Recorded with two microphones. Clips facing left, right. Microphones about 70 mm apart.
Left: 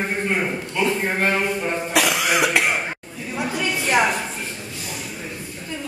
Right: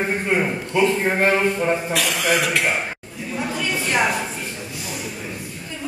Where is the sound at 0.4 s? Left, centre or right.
Centre.